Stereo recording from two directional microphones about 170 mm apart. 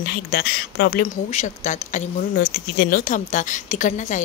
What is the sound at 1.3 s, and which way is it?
A woman's voice, 45° left (ahead or behind).